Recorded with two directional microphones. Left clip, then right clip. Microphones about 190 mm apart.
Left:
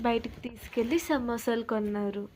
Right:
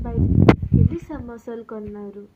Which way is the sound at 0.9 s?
20° left (ahead or behind).